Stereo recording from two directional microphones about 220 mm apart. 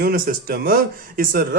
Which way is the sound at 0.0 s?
40° right (ahead or behind).